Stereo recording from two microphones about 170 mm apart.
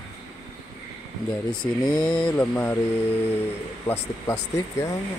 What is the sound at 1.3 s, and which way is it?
Speech, 5° left (ahead or behind).